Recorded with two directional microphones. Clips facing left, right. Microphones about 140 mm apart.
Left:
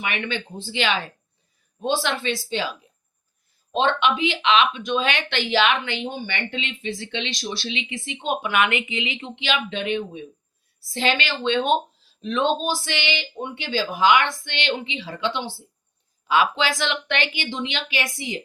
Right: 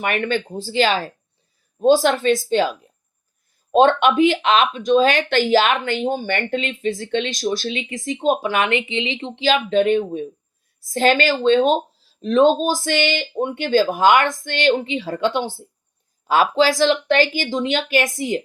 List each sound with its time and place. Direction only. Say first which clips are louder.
0.0 s a woman's voice: right 7 dB; 45° right (ahead or behind)